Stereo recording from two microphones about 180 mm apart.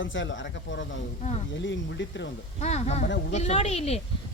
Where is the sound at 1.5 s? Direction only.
90° left.